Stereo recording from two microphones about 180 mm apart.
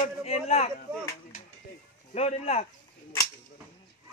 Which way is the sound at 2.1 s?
35° left (ahead or behind).